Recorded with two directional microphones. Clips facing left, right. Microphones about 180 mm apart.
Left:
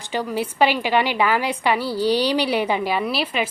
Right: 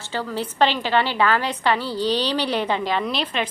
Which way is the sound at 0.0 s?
15° left (ahead or behind).